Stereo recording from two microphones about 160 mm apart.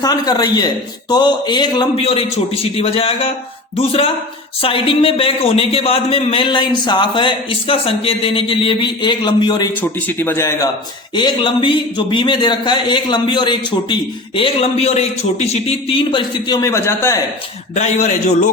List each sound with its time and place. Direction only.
0.0 s a man's voice: 25° left (ahead or behind)
10.1 s speech: 10° left (ahead or behind)
11.1 s speech: 30° left (ahead or behind)
17.7 s a man's voice: 45° left (ahead or behind)